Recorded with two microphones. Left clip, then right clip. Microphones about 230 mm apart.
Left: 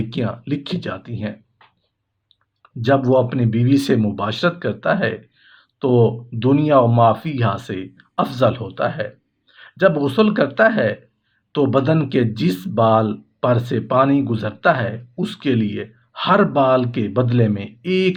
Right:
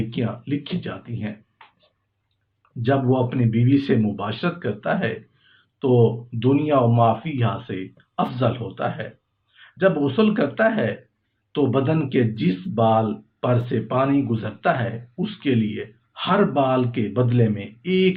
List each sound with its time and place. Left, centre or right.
0.1 s speech: left
2.8 s speech: left